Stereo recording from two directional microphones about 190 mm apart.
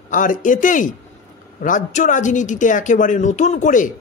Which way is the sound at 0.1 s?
45° left (ahead or behind).